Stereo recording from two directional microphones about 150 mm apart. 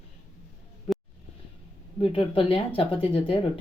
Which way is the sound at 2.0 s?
35° left (ahead or behind).